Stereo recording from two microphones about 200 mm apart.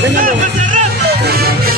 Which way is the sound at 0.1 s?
40° right (ahead or behind).